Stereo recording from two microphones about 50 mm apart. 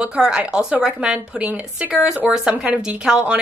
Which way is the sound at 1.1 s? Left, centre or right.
Right.